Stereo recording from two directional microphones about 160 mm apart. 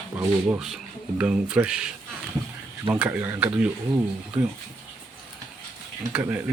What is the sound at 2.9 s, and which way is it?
Speech, 10° right (ahead or behind).